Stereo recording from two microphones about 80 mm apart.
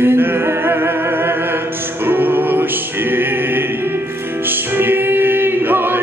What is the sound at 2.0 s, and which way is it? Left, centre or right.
Music, right.